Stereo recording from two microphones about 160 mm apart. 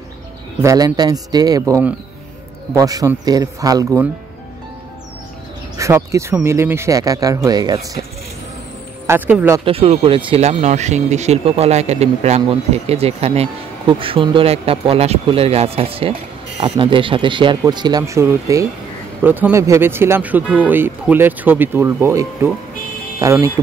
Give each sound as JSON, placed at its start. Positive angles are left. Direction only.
{"t": 0.6, "sound": "speech", "side_deg": -20}
{"t": 5.8, "sound": "speech", "side_deg": -20}
{"t": 9.0, "sound": "speech", "side_deg": -15}
{"t": 9.7, "sound": "speech", "side_deg": -35}